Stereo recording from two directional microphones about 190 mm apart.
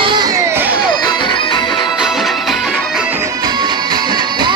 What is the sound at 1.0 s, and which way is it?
Music, 25° left (ahead or behind).